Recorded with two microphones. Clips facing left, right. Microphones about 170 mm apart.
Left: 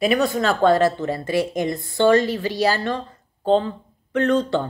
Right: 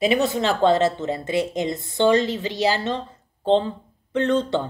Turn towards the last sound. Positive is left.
turn(degrees=-20)  # may be behind; listen again after turning